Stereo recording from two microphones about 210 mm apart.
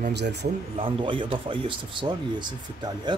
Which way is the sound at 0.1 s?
55° right (ahead or behind).